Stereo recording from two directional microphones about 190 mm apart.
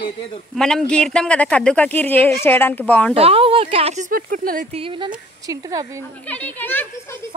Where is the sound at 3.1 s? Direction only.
30° right (ahead or behind); by 4.6 s 45° right (ahead or behind).